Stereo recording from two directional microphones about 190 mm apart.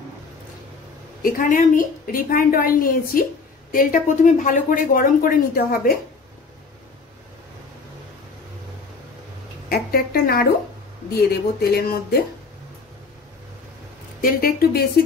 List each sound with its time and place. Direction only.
1.2 s speech: 45° left (ahead or behind)
9.7 s speech: 50° left (ahead or behind)
11.6 s speech: 55° left (ahead or behind)
14.2 s speech: 55° left (ahead or behind)